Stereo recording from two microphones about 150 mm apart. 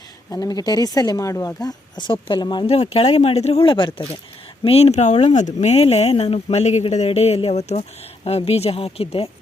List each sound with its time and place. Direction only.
0.3 s speech: 25° left (ahead or behind)
2.8 s speech: 45° left (ahead or behind)